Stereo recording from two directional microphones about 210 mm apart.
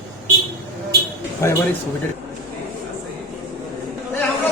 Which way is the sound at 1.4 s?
10° left (ahead or behind).